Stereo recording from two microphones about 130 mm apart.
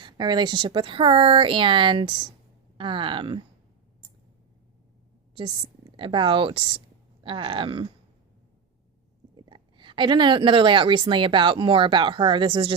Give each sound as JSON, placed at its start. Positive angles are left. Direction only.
{"t": 0.0, "sound": "speech", "side_deg": -35}
{"t": 5.3, "sound": "a woman's voice", "side_deg": -40}
{"t": 9.3, "sound": "a woman's voice", "side_deg": -40}